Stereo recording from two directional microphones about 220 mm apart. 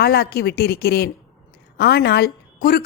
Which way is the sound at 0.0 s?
45° left (ahead or behind).